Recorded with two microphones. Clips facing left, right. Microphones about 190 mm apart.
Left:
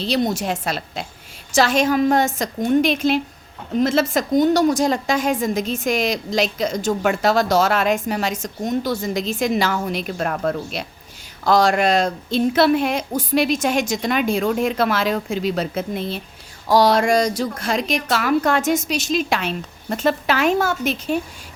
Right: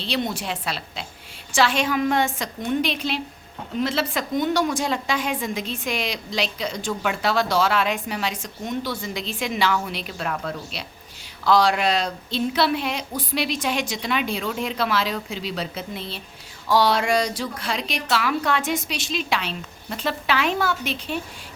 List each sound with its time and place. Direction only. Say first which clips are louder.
0.0 s a woman's voice: left 6 dB; 40° left (ahead or behind)